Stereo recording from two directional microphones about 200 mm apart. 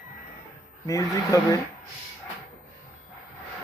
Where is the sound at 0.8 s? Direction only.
15° left (ahead or behind).